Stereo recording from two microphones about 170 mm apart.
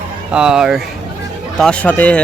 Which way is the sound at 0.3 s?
5° right (ahead or behind).